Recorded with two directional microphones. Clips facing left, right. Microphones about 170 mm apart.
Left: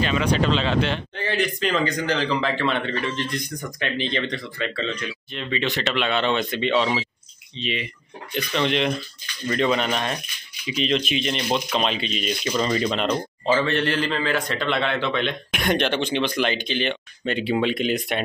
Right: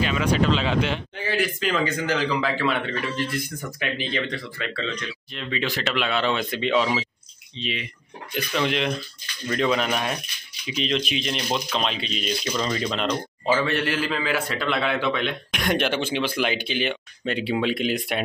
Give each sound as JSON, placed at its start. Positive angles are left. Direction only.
{"t": 0.0, "sound": "speech", "side_deg": -5}
{"t": 13.5, "sound": "speech", "side_deg": -10}